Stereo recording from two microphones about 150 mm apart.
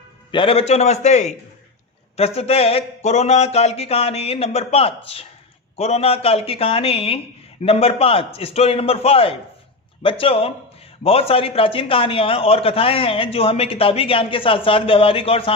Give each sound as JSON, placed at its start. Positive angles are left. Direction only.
{"t": 0.3, "sound": "a man's voice", "side_deg": 35}